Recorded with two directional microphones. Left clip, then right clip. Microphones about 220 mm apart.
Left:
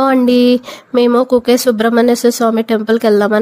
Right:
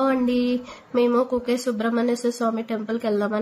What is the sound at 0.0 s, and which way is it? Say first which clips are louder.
A woman's voice: left 11 dB; 45° left (ahead or behind).